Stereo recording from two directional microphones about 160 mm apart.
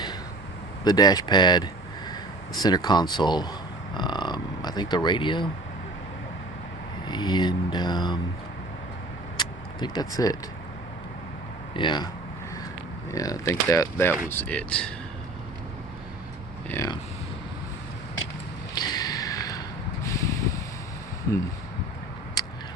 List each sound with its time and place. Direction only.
0.9 s speech: 25° left (ahead or behind)
3.9 s a sound: 30° left (ahead or behind)
7.1 s speech: 25° left (ahead or behind)
9.4 s vehicle: 25° left (ahead or behind)
11.7 s speech: 30° left (ahead or behind)
13.1 s speech: 20° left (ahead or behind)
16.6 s speech: 15° left (ahead or behind)
18.7 s a sound: 25° left (ahead or behind)
22.4 s a sound: 25° left (ahead or behind)